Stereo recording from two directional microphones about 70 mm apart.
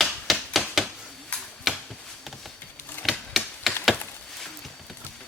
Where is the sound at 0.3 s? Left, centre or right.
Centre.